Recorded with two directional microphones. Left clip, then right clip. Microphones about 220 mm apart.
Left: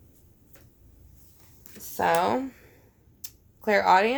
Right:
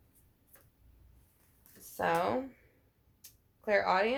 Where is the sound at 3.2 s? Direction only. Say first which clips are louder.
Left 9 dB; 45° left (ahead or behind).